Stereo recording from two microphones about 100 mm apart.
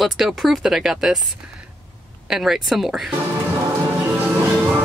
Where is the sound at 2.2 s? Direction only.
5° right (ahead or behind).